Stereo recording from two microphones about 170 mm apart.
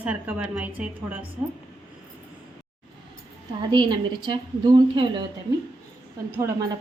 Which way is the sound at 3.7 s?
25° right (ahead or behind).